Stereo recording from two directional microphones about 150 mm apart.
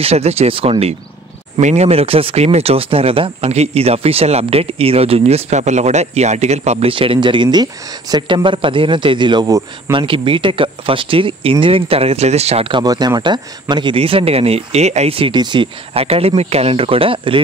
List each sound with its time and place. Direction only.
0.0 s speech: 45° right (ahead or behind)